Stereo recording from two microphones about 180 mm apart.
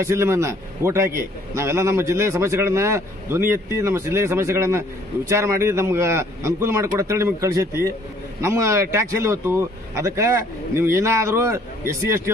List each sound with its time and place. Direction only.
0.0 s a man's voice: 15° right (ahead or behind)